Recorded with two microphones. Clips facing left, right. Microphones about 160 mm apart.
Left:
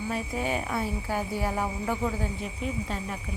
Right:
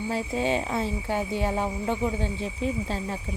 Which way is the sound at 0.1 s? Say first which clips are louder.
Right 4 dB; 25° right (ahead or behind).